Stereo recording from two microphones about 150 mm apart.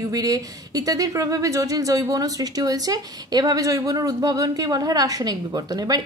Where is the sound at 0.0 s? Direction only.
25° right (ahead or behind).